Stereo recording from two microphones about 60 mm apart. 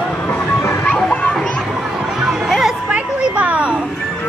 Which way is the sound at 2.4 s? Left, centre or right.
Centre.